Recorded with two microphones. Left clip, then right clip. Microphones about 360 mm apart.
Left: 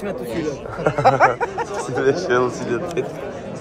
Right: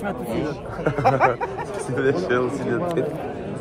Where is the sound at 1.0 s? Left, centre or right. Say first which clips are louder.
Left 4 dB; left.